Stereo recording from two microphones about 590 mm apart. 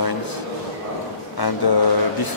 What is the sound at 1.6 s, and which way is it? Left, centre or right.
Speech, left.